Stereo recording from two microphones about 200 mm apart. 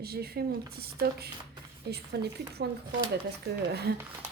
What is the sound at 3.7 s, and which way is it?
Speech, 55° right (ahead or behind).